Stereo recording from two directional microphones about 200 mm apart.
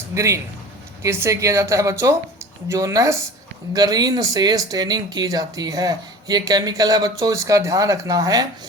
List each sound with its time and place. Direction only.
0.1 s speech: 15° right (ahead or behind)